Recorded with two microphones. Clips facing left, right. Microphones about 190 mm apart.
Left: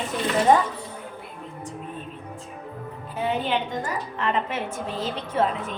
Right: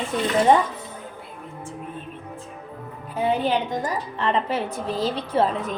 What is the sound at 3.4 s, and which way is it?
A woman's voice, 35° right (ahead or behind).